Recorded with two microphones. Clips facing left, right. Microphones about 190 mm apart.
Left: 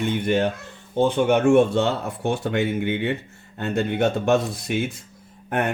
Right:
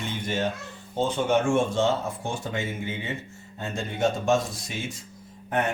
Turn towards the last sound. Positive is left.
turn(degrees=55)  # may be behind; listen again after turning